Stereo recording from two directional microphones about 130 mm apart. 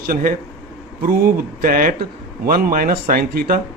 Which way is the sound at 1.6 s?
90° right.